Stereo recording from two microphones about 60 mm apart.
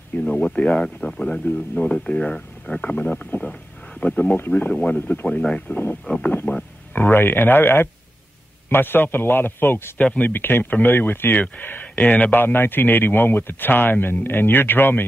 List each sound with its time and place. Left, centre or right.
0.3 s speech: left
6.3 s speech: left
7.0 s a man's voice: left
9.9 s speech: left
10.3 s a man's voice: left